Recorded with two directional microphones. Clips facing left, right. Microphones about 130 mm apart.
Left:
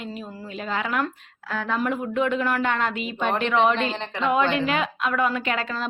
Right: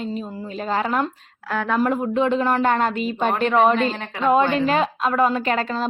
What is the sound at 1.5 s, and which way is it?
Speech, 55° right (ahead or behind).